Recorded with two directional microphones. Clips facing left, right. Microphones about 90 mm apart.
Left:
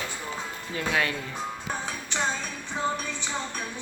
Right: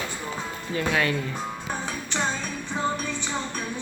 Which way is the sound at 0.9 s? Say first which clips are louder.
Right 2 dB; 10° left (ahead or behind).